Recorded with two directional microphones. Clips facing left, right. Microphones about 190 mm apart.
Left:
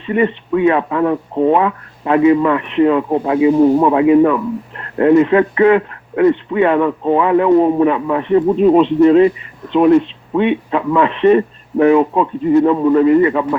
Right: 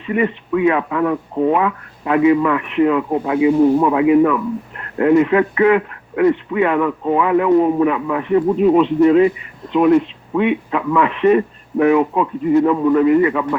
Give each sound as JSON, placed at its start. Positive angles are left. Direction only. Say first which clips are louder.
{"t": 0.0, "sound": "speech", "louder": "left 3 dB", "side_deg": 30}